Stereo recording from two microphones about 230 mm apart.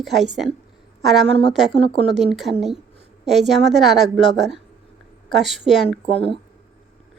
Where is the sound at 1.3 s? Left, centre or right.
Left.